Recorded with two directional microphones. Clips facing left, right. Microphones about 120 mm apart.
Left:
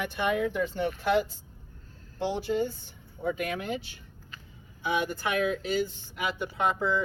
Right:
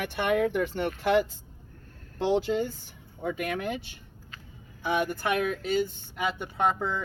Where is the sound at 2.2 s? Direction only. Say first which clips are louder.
Right 3 dB; 90° right.